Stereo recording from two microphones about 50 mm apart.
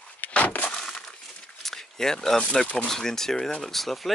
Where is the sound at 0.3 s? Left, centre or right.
Left.